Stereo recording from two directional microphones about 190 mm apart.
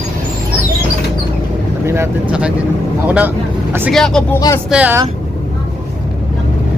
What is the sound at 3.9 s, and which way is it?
Speech, 5° left (ahead or behind).